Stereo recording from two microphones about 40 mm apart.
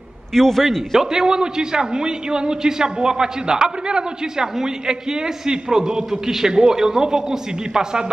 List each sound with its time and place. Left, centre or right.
0.3 s a man's voice: centre
0.9 s a man's voice: centre